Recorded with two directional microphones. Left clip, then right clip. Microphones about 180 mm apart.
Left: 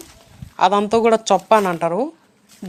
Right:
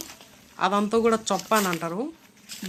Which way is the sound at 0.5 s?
25° left (ahead or behind).